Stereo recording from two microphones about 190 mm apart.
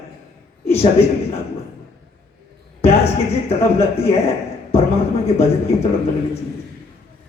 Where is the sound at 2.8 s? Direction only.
35° left (ahead or behind).